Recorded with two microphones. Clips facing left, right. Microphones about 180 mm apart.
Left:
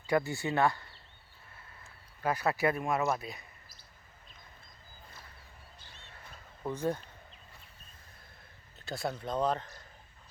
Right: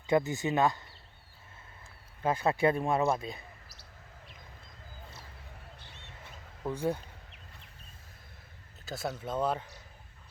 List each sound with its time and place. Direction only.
0.1 s speech: 20° right (ahead or behind)
2.2 s speech: 25° right (ahead or behind)
6.7 s speech: 10° right (ahead or behind)
8.8 s speech: centre (ahead or behind)